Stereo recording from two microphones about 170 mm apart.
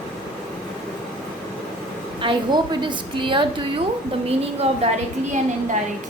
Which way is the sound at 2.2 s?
30° right (ahead or behind).